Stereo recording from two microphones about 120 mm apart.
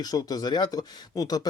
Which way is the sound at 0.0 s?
30° left (ahead or behind).